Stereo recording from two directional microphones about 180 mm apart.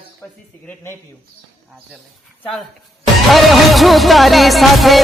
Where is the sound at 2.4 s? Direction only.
Centre (ahead or behind).